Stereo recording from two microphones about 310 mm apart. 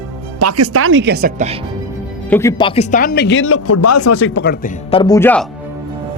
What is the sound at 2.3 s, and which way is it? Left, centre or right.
Speech, centre.